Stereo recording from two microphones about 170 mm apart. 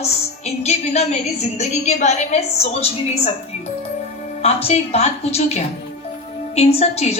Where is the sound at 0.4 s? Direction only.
40° left (ahead or behind).